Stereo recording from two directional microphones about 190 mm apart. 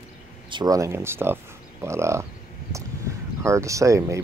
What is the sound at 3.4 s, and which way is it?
Speech, 15° right (ahead or behind).